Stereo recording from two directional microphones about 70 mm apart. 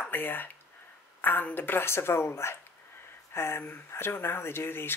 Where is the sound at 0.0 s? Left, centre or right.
Left.